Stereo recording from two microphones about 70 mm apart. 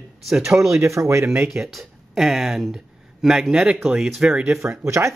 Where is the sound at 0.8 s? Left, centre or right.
Right.